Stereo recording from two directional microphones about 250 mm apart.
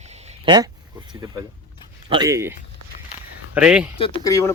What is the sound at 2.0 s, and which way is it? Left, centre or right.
Speech, centre.